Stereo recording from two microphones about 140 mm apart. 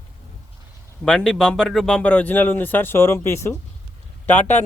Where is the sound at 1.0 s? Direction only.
5° left (ahead or behind).